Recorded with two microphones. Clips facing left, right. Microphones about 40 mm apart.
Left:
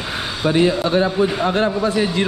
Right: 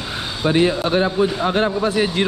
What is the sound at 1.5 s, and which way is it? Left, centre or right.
Speech, right.